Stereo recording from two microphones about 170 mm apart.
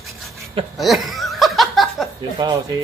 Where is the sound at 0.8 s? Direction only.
Centre (ahead or behind).